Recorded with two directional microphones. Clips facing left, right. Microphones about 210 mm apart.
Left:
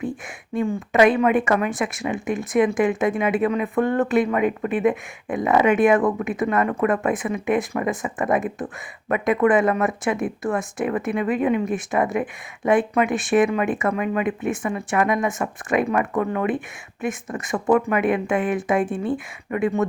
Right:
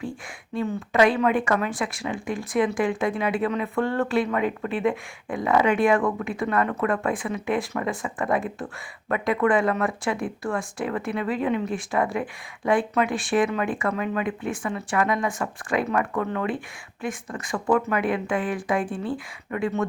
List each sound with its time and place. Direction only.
0.5 s speech: 15° left (ahead or behind)